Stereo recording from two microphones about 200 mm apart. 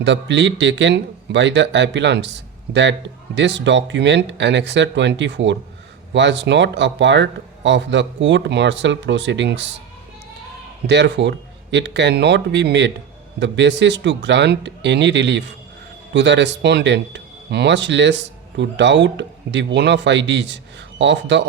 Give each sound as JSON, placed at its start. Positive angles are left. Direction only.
{"t": 0.0, "sound": "speech", "side_deg": -65}
{"t": 10.8, "sound": "speech", "side_deg": -60}